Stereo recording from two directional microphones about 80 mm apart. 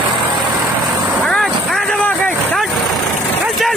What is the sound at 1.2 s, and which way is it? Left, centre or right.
Vehicle, centre.